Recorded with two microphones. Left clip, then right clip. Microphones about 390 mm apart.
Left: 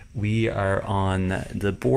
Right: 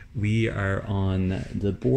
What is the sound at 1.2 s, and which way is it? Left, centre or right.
Speech, left.